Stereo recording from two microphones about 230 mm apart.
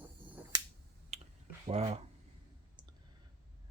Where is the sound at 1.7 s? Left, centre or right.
Right.